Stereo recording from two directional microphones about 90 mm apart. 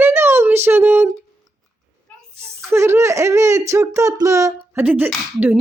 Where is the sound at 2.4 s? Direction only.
30° right (ahead or behind).